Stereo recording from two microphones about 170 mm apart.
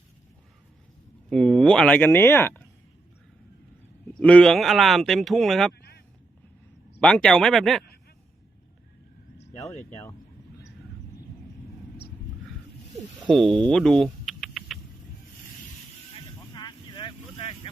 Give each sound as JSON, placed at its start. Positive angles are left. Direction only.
{"t": 1.3, "sound": "speech", "side_deg": 0}
{"t": 4.1, "sound": "speech", "side_deg": 5}
{"t": 7.0, "sound": "speech", "side_deg": 5}
{"t": 13.2, "sound": "rodents", "side_deg": 0}
{"t": 16.6, "sound": "vehicle", "side_deg": 25}